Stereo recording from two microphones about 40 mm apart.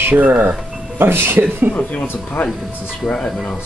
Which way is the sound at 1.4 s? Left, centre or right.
Right.